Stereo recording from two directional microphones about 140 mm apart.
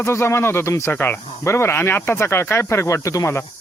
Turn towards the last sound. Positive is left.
turn(degrees=20)  # may be behind; listen again after turning